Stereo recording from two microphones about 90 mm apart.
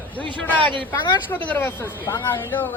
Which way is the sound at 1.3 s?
20° left (ahead or behind).